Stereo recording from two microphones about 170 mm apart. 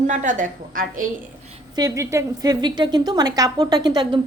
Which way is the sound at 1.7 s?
20° right (ahead or behind).